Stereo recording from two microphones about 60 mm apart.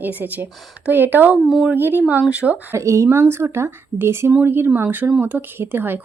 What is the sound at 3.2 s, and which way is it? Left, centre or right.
Speech, right.